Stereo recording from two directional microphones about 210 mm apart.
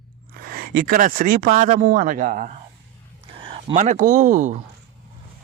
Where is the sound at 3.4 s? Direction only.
25° right (ahead or behind).